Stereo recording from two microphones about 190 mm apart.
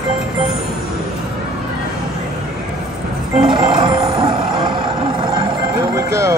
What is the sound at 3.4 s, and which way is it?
Music, 25° right (ahead or behind).